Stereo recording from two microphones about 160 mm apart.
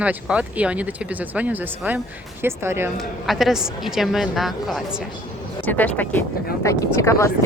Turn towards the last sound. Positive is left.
turn(degrees=20)  # may be behind; listen again after turning